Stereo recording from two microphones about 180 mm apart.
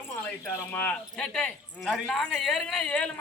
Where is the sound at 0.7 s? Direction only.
10° left (ahead or behind).